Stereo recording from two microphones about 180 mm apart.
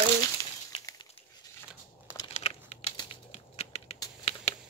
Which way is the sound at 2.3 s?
35° left (ahead or behind).